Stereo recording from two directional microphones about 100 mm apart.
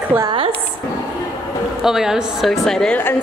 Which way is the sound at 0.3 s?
60° right (ahead or behind).